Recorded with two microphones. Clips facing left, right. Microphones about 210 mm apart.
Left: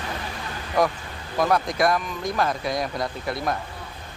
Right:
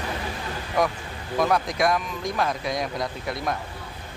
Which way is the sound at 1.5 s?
Centre (ahead or behind).